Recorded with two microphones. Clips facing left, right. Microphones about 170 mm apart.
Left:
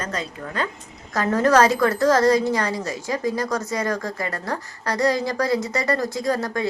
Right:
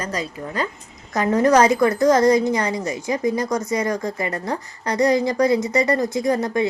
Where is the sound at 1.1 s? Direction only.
15° right (ahead or behind).